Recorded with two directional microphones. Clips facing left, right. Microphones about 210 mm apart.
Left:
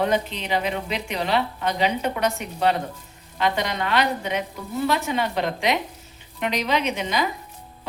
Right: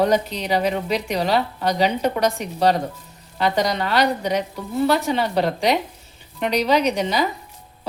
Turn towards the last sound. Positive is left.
turn(degrees=-35)  # may be behind; listen again after turning